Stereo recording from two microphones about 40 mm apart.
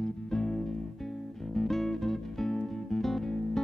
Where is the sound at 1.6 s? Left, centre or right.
Centre.